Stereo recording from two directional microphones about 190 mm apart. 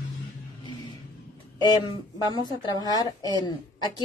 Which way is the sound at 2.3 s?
20° left (ahead or behind).